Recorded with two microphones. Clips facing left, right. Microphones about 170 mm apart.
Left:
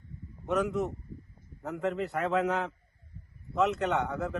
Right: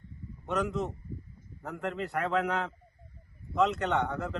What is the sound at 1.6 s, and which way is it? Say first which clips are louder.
A man's voice: left 3 dB; 20° left (ahead or behind).